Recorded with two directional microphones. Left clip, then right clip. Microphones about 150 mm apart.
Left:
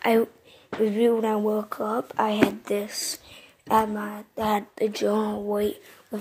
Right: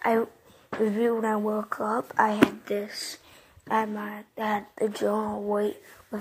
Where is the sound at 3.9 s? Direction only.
20° left (ahead or behind).